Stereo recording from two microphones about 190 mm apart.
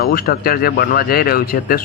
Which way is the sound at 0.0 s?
50° left (ahead or behind).